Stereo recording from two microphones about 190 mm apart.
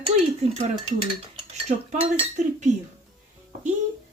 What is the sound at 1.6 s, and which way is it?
Speech, 35° right (ahead or behind).